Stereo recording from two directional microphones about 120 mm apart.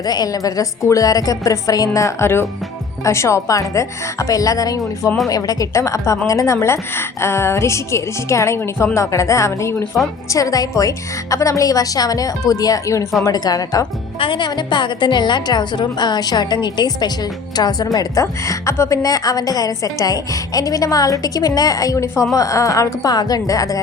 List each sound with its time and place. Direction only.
0.0 s a woman's voice: 35° left (ahead or behind)
14.2 s a woman's voice: 45° left (ahead or behind)